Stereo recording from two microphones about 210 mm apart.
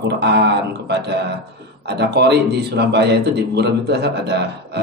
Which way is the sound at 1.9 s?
50° right (ahead or behind).